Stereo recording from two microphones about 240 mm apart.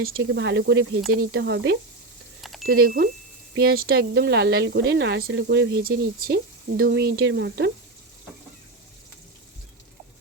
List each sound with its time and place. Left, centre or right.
0.0 s speech: right
2.4 s a sound: centre
2.6 s speech: right